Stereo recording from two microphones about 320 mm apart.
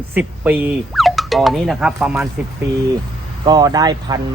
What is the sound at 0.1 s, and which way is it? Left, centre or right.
Speech, centre.